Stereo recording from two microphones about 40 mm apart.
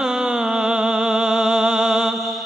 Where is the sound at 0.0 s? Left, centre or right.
Centre.